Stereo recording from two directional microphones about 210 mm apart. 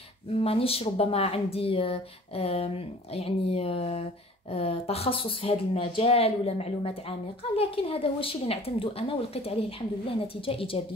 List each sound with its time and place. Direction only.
0.4 s speech: 25° left (ahead or behind)